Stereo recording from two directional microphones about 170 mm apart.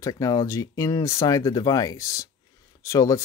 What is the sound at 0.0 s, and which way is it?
Speech, 20° left (ahead or behind).